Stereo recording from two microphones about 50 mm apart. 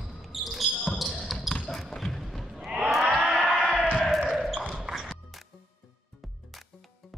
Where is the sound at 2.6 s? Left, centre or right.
Centre.